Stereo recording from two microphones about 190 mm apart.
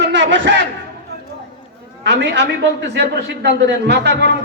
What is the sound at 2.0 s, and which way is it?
A man's voice, 65° right (ahead or behind).